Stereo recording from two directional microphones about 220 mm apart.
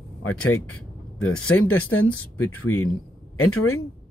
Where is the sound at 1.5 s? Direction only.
70° left (ahead or behind).